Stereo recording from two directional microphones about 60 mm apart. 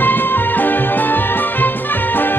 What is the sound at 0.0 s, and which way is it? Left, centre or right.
Music, left.